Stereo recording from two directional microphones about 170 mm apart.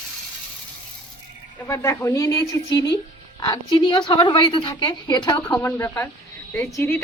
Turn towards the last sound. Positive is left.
turn(degrees=15)  # may be behind; listen again after turning